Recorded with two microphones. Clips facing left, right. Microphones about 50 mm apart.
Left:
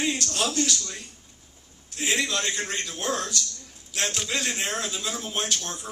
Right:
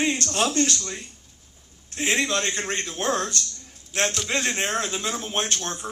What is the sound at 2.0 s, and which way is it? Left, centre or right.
Speech, right.